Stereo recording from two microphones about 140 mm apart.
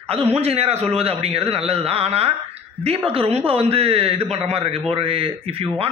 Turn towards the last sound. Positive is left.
turn(degrees=-40)  # may be behind; listen again after turning